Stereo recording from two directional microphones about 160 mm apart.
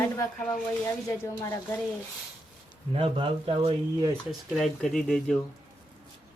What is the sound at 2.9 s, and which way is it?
Speech, 35° right (ahead or behind).